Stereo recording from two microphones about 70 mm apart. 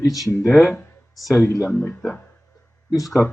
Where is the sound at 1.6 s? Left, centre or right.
Left.